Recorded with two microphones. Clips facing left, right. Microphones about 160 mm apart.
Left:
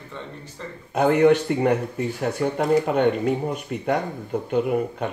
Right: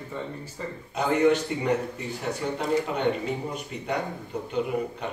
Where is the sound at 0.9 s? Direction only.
60° left (ahead or behind).